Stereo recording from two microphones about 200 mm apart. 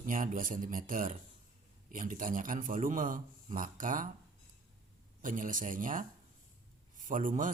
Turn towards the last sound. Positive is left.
turn(degrees=-40)  # may be behind; listen again after turning